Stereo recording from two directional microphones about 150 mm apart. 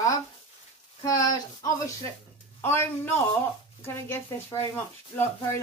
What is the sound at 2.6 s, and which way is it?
A woman's voice, 15° left (ahead or behind).